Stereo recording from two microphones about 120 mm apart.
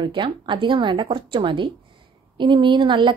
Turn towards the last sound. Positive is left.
turn(degrees=-40)  # may be behind; listen again after turning